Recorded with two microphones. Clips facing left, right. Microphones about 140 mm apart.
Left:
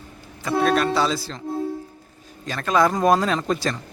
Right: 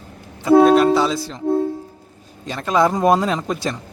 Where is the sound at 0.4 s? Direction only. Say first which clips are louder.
Right 9 dB; 20° right (ahead or behind).